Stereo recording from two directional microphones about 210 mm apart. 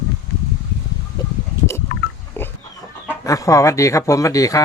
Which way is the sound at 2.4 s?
10° left (ahead or behind).